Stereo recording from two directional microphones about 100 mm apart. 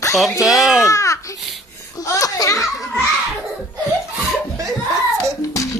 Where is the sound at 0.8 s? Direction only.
30° left (ahead or behind).